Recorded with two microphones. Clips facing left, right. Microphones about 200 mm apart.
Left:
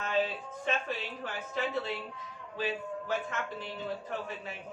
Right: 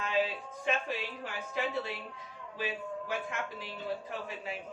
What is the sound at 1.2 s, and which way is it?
A woman's voice, 15° right (ahead or behind).